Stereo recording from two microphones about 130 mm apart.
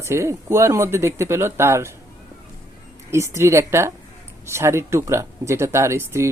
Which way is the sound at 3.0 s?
20° right (ahead or behind).